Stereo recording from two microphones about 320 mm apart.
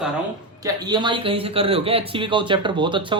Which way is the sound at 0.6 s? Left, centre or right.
Centre.